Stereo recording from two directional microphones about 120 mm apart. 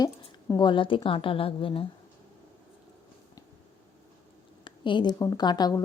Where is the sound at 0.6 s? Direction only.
45° left (ahead or behind).